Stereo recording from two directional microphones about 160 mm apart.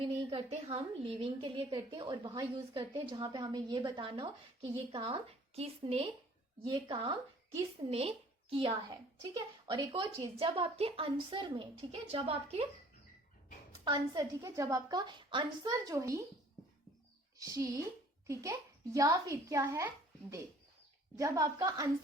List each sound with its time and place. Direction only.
0.0 s a sound: 40° right (ahead or behind)
0.5 s a woman's voice: 40° right (ahead or behind)
8.9 s a woman's voice: 25° right (ahead or behind)
13.8 s a woman's voice: 30° right (ahead or behind)
17.3 s a woman's voice: 20° right (ahead or behind)
18.9 s a woman's voice: 20° right (ahead or behind)
21.2 s a woman's voice: 20° right (ahead or behind)